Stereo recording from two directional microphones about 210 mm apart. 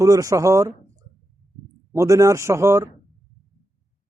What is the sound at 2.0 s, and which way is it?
Speech, 15° right (ahead or behind).